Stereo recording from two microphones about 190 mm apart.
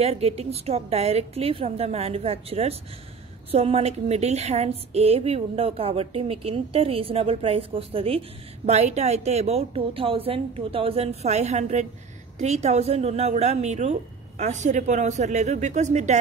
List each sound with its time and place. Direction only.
0.0 s a woman's voice: 35° right (ahead or behind)